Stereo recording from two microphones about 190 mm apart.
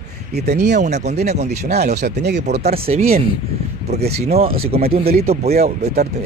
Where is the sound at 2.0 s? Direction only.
60° right (ahead or behind).